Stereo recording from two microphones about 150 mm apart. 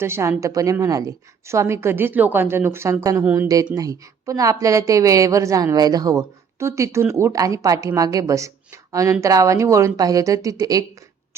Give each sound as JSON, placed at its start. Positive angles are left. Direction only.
{"t": 0.0, "sound": "a woman's voice", "side_deg": -15}
{"t": 3.8, "sound": "a woman's voice", "side_deg": -20}